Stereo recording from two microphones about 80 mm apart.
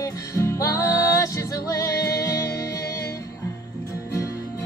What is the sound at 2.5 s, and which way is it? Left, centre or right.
Music, left.